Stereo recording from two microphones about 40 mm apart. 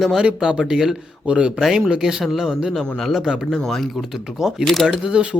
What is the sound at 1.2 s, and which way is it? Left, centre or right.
Speech, right.